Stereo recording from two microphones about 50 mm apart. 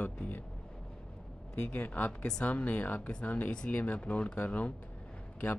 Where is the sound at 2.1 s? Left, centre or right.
Centre.